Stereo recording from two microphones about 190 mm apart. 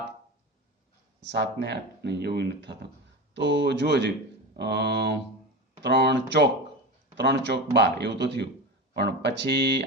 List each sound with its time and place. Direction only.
1.2 s speech: 65° right (ahead or behind)